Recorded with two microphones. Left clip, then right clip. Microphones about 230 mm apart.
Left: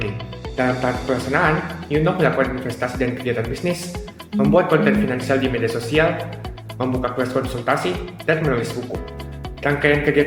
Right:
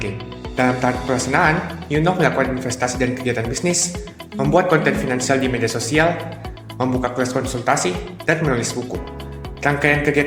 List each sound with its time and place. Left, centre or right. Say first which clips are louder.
0.5 s speech: right 2 dB; right